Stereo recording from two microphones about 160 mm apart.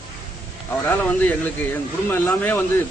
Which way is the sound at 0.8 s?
10° left (ahead or behind).